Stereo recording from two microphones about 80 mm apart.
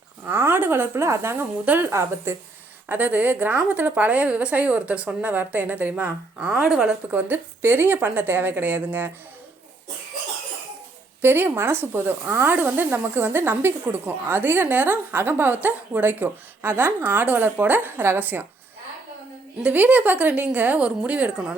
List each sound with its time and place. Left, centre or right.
0.3 s speech: right
1.9 s speech: right
2.9 s speech: right
7.1 s speech: right
11.2 s speech: right
19.6 s a woman's voice: centre